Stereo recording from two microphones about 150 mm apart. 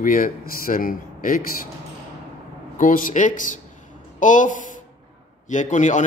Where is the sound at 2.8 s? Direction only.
65° left (ahead or behind).